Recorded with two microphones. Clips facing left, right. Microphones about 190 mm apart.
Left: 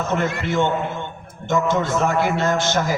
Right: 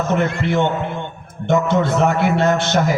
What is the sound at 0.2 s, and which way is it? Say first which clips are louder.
A man's voice: right 3 dB; 60° right (ahead or behind).